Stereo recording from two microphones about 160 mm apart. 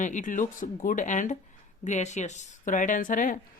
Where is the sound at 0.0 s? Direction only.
55° left (ahead or behind).